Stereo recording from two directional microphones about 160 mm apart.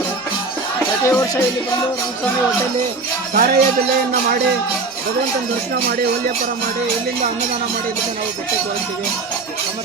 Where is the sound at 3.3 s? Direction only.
65° right (ahead or behind).